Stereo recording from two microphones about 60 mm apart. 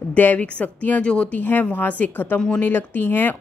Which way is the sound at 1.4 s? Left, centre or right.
Left.